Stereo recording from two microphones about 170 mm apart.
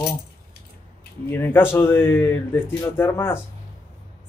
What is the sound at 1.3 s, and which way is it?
Speech, 15° left (ahead or behind).